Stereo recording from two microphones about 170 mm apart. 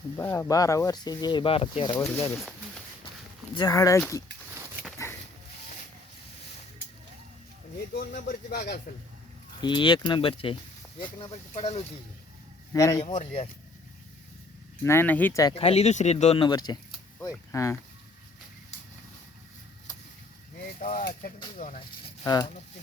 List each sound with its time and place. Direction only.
0.2 s speech: 15° left (ahead or behind)
2.1 s speech: 15° left (ahead or behind)
3.5 s speech: 20° left (ahead or behind)
8.1 s speech: 60° left (ahead or behind)
9.6 s speech: 30° left (ahead or behind)
12.7 s speech: 20° left (ahead or behind)
13.1 s speech: 40° left (ahead or behind)
14.8 s speech: 10° left (ahead or behind)
15.5 s speech: 35° left (ahead or behind); by 17.7 s 15° left (ahead or behind)
20.7 s speech: 50° left (ahead or behind)
22.2 s speech: 20° left (ahead or behind)